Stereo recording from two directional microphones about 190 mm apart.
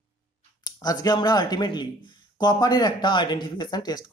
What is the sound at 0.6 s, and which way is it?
A man's voice, 20° left (ahead or behind).